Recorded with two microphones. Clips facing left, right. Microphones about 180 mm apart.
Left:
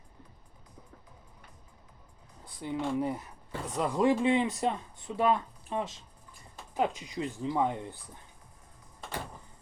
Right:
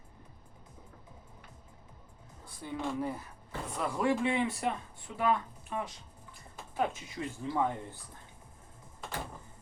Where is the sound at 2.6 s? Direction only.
20° left (ahead or behind).